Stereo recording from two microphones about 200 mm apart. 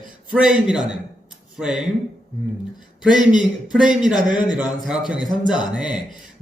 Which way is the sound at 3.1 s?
20° left (ahead or behind).